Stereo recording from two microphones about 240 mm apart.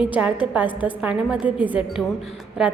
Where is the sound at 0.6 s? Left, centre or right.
Centre.